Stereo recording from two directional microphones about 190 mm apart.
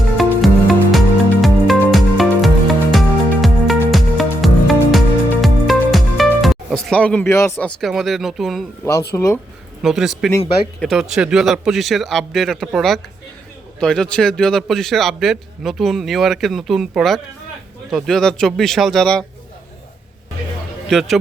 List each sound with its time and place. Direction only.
0.2 s music: centre (ahead or behind)
7.8 s a man's voice: centre (ahead or behind)
8.8 s speech: 15° left (ahead or behind)
9.8 s a man's voice: centre (ahead or behind)
20.9 s a man's voice: centre (ahead or behind)